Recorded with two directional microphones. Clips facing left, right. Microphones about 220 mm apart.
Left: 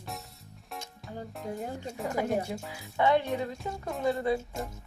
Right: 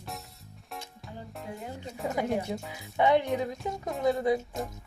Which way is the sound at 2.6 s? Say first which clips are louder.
Even; centre (ahead or behind).